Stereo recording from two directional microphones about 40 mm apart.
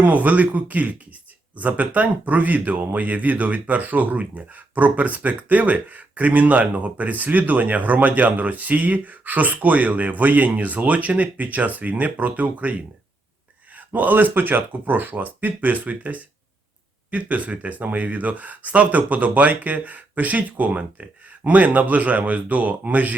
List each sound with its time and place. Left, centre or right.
0.0 s speech: right